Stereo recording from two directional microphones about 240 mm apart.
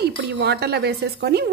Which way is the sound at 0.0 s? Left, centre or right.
Right.